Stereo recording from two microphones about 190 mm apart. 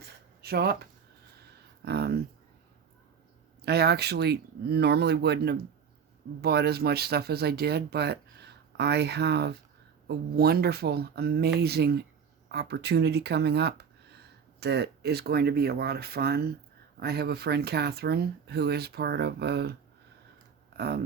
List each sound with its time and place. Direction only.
0.0 s a sound: 55° right (ahead or behind)
1.8 s speech: 60° right (ahead or behind)
3.6 s speech: 60° right (ahead or behind)
20.7 s speech: 55° right (ahead or behind)